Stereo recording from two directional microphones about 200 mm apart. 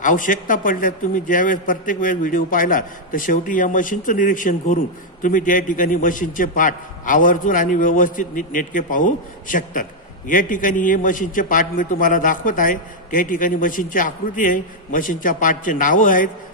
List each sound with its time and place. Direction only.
0.0 s a man's voice: 40° left (ahead or behind)